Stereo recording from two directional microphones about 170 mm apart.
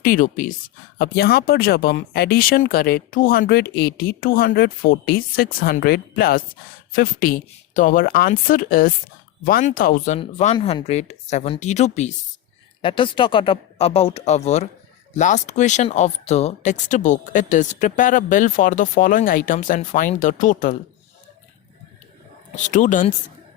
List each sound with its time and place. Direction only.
0.0 s speech: 55° left (ahead or behind)
0.9 s speech: 65° left (ahead or behind)
10.2 s speech: 40° left (ahead or behind)
12.8 s speech: 30° left (ahead or behind); by 20.7 s 50° left (ahead or behind)
22.5 s speech: 50° left (ahead or behind)